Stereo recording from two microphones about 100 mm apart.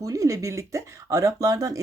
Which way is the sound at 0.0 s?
35° right (ahead or behind).